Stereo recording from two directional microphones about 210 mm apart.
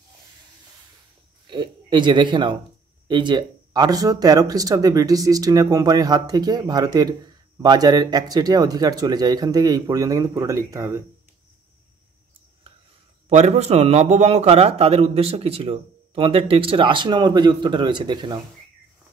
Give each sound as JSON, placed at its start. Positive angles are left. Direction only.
{"t": 1.5, "sound": "speech", "side_deg": -20}
{"t": 13.3, "sound": "a man's voice", "side_deg": -30}